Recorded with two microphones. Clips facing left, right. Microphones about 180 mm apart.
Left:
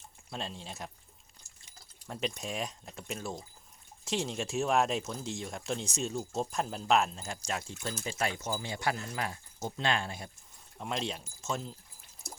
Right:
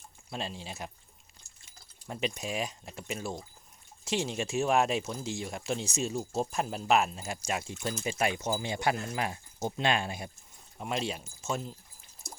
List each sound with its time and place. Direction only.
0.3 s speech: 5° right (ahead or behind)
2.0 s speech: 5° right (ahead or behind)